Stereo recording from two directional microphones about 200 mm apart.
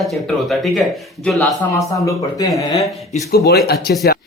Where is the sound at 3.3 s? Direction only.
50° left (ahead or behind).